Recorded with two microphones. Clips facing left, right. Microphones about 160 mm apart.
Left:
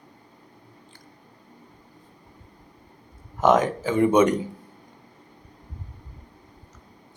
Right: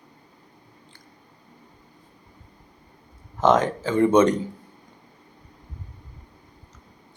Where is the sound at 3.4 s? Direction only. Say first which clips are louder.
Even; 15° left (ahead or behind).